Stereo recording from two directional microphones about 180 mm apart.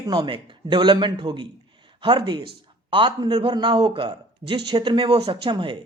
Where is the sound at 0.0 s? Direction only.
25° right (ahead or behind).